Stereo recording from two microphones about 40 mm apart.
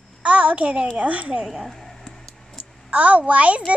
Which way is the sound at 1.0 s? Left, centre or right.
Right.